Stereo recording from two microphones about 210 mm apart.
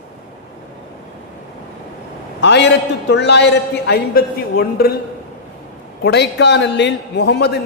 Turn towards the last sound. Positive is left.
turn(degrees=50)  # may be behind; listen again after turning